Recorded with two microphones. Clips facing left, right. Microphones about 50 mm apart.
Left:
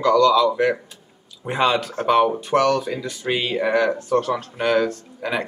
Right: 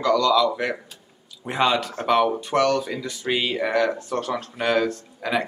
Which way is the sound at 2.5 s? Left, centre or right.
Left.